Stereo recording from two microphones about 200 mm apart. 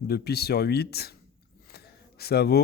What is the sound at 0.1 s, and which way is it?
Speech, 50° left (ahead or behind).